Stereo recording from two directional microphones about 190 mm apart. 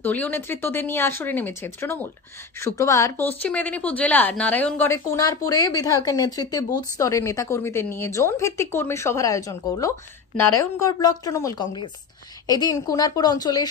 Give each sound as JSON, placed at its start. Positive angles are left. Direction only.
{"t": 0.0, "sound": "a woman's voice", "side_deg": 10}